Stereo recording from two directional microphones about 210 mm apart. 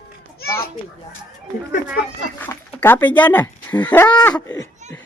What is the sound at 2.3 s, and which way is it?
Speech, 10° left (ahead or behind).